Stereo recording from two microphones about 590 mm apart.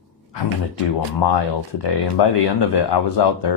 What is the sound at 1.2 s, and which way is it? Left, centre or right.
Speech, left.